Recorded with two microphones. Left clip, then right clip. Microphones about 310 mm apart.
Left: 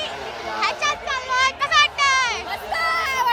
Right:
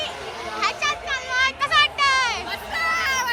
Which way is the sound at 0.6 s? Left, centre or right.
Centre.